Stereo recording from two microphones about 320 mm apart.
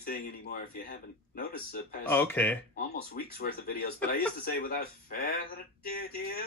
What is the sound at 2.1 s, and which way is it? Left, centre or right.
Speech, centre.